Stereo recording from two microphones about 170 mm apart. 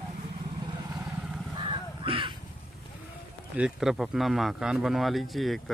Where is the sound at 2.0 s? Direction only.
30° right (ahead or behind).